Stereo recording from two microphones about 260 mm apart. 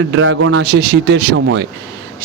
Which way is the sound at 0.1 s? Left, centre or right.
Right.